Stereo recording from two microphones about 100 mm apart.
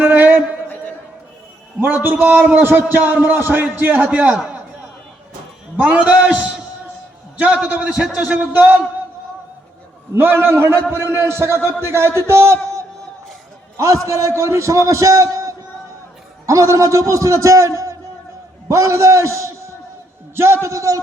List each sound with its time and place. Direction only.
0.0 s a sound: 20° right (ahead or behind)
1.8 s a man's voice: 20° right (ahead or behind)
5.7 s a man's voice: 15° right (ahead or behind)
10.2 s a man's voice: 20° right (ahead or behind)